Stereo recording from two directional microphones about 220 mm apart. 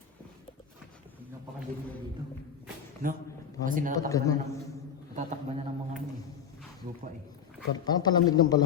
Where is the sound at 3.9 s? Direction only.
15° left (ahead or behind).